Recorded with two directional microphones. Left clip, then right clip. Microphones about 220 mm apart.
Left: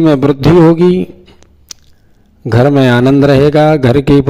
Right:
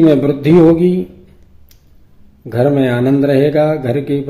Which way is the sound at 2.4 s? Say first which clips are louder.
Left 4 dB; 45° left (ahead or behind).